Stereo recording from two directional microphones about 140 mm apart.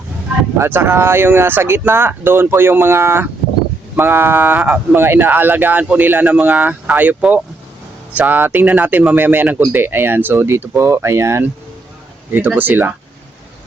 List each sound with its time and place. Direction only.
0.6 s speech: 15° right (ahead or behind)